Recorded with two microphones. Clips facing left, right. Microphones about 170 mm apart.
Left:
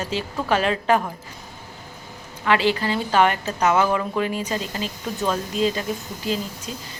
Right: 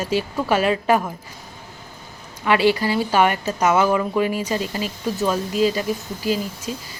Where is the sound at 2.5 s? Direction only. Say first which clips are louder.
Right 3 dB; 10° right (ahead or behind).